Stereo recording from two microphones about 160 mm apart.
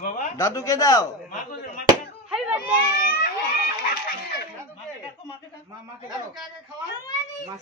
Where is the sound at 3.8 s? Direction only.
65° left (ahead or behind).